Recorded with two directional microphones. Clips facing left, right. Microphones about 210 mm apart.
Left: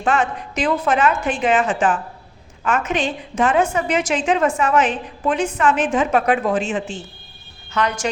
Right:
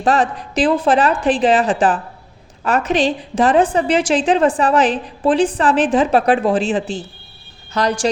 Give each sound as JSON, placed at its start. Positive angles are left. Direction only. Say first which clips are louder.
{"t": 0.0, "sound": "a woman's voice", "louder": "right 3 dB", "side_deg": -35}